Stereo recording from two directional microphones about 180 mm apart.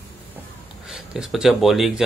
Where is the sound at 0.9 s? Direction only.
5° right (ahead or behind).